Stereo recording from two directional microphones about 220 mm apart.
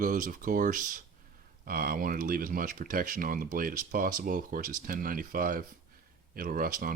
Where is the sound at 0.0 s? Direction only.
40° right (ahead or behind).